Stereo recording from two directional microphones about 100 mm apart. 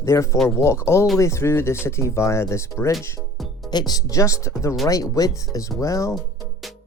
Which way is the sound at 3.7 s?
45° left (ahead or behind).